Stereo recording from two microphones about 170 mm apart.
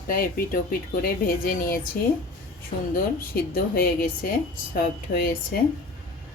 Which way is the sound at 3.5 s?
60° left (ahead or behind).